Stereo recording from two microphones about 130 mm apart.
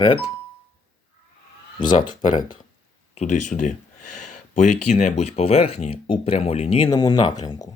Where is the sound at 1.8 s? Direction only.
35° left (ahead or behind).